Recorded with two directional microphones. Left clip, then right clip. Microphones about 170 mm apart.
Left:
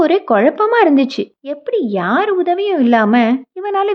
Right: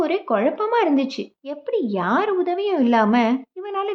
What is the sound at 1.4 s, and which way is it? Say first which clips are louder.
Speech: left 5 dB; 25° left (ahead or behind).